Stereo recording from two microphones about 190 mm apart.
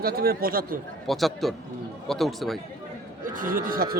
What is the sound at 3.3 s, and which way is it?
Speech, 45° right (ahead or behind).